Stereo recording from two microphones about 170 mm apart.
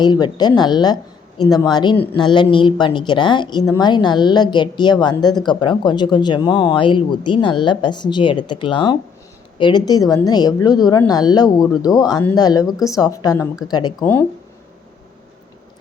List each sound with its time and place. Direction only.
0.0 s a woman's voice: 25° left (ahead or behind)
14.0 s speech: 10° left (ahead or behind)